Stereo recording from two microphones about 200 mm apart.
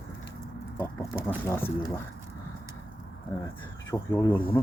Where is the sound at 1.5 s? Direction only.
10° left (ahead or behind).